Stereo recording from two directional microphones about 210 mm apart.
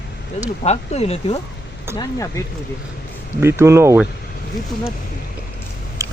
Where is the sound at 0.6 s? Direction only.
30° left (ahead or behind).